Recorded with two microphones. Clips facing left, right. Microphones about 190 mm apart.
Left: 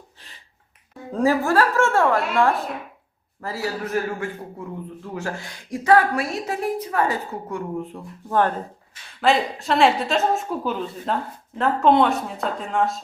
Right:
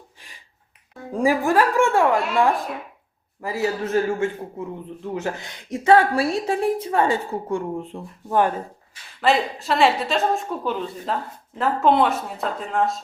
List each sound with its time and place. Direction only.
1.1 s a woman's voice: 15° right (ahead or behind)
8.3 s a woman's voice: 10° right (ahead or behind)
9.2 s a woman's voice: centre (ahead or behind)